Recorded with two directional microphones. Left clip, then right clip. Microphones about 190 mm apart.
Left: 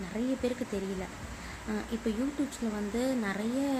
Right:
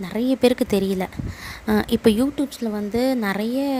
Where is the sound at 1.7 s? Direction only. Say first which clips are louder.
Right 16 dB; 55° right (ahead or behind).